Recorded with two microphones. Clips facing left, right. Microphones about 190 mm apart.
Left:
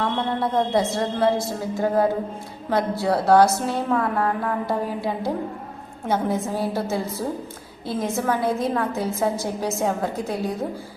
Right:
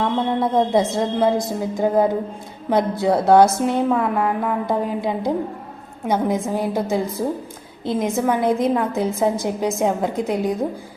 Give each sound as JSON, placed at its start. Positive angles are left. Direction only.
{"t": 0.3, "sound": "a woman's voice", "side_deg": -20}